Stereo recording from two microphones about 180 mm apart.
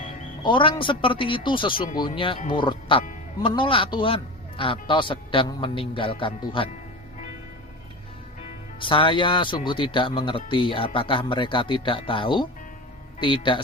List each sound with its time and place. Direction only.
0.4 s speech: 25° left (ahead or behind)
8.8 s speech: 30° left (ahead or behind)